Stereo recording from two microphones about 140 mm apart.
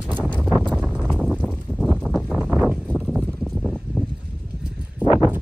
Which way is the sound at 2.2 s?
5° right (ahead or behind).